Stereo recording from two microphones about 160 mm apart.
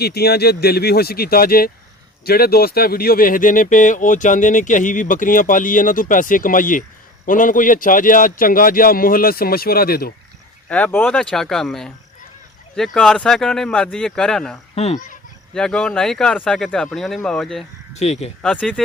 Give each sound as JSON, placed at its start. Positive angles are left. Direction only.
{"t": 0.0, "sound": "speech", "side_deg": 80}
{"t": 10.7, "sound": "speech", "side_deg": 10}
{"t": 14.8, "sound": "speech", "side_deg": 50}
{"t": 15.5, "sound": "speech", "side_deg": 5}
{"t": 17.9, "sound": "speech", "side_deg": 45}
{"t": 18.4, "sound": "speech", "side_deg": 5}